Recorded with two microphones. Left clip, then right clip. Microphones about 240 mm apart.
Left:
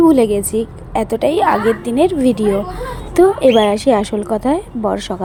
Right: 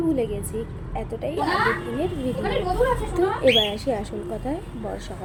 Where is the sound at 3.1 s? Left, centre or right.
Left.